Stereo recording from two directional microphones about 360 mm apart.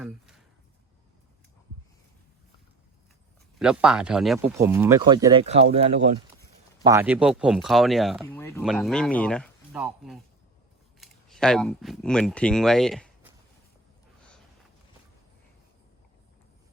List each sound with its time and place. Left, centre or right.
3.6 s speech: centre